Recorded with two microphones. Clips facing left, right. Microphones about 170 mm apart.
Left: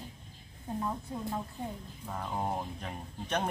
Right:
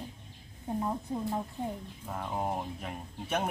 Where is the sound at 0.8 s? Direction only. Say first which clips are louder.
Right 3 dB; 20° right (ahead or behind).